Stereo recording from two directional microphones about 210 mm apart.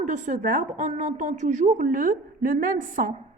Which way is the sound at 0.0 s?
35° right (ahead or behind).